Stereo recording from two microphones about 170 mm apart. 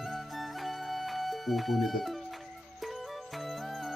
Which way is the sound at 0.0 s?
Centre (ahead or behind).